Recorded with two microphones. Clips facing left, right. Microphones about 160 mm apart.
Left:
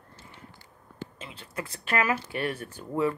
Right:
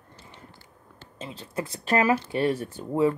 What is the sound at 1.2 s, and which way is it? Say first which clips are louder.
Speech: right 7 dB; 35° right (ahead or behind).